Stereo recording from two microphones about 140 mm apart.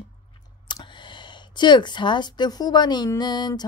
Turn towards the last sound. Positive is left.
turn(degrees=30)  # may be behind; listen again after turning